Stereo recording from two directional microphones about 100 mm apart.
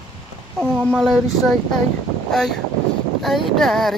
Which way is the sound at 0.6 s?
5° left (ahead or behind).